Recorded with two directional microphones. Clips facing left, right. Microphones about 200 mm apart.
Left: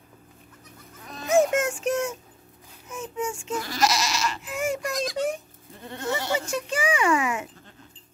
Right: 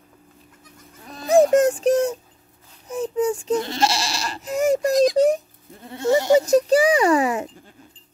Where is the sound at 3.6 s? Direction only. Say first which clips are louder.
Right 2 dB; 25° right (ahead or behind).